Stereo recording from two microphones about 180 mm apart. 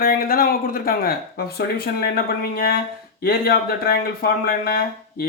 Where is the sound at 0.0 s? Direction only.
55° left (ahead or behind).